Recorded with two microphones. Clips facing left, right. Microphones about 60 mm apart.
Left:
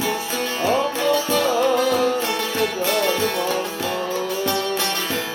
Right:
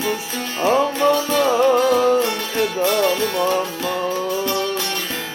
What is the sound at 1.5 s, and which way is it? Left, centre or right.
Music, right.